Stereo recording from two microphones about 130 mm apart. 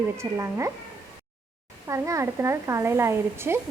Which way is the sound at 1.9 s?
25° right (ahead or behind).